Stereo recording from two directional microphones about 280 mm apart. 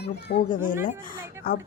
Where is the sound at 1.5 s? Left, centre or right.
Left.